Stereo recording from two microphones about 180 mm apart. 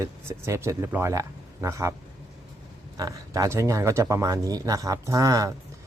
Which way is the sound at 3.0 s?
20° right (ahead or behind).